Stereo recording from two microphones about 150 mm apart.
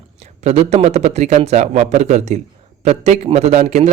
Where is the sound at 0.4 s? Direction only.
50° right (ahead or behind).